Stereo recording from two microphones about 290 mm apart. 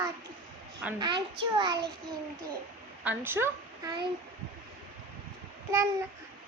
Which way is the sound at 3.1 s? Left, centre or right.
Centre.